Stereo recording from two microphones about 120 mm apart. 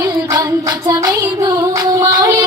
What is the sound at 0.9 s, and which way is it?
Music, 30° right (ahead or behind).